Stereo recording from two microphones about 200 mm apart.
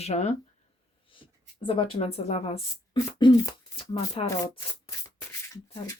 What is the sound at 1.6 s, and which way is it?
Speech, 25° left (ahead or behind).